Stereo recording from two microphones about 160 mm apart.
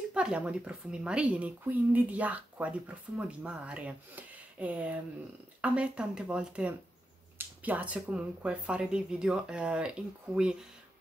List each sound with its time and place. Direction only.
0.1 s speech: 5° right (ahead or behind)